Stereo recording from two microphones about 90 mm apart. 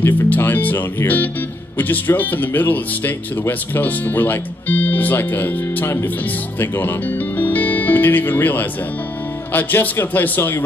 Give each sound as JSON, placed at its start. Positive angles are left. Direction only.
{"t": 0.0, "sound": "speech", "side_deg": 20}